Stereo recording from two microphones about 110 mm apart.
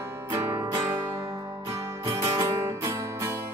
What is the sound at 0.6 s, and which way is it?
Music, 40° right (ahead or behind).